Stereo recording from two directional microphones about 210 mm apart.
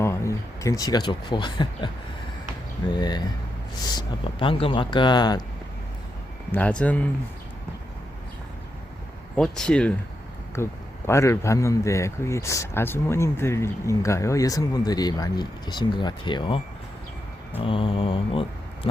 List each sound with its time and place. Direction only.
0.0 s speech: 15° left (ahead or behind)
2.9 s speech: 20° left (ahead or behind)
6.5 s speech: 5° left (ahead or behind)
9.3 s speech: 5° left (ahead or behind); by 16.6 s 20° left (ahead or behind)
17.6 s mantra: 25° left (ahead or behind)